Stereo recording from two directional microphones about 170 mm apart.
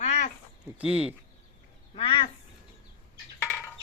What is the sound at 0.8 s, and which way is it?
Speech, 5° right (ahead or behind).